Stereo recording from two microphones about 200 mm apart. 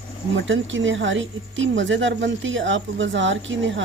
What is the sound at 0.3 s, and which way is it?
Speech, 70° right (ahead or behind).